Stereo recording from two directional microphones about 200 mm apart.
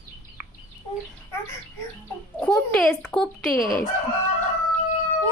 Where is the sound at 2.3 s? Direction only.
5° left (ahead or behind).